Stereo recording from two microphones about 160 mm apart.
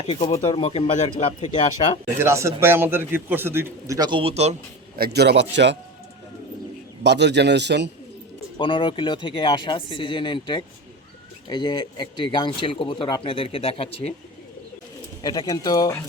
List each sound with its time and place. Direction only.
0.0 s speech: 40° left (ahead or behind)
2.1 s a man's voice: 15° right (ahead or behind); by 4.5 s 40° right (ahead or behind)
4.9 s a man's voice: 80° right
7.0 s a man's voice: 90° right
8.5 s speech: 30° left (ahead or behind)
15.2 s speech: 25° left (ahead or behind)